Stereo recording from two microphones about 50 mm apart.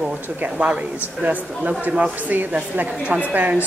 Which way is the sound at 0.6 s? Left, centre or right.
Right.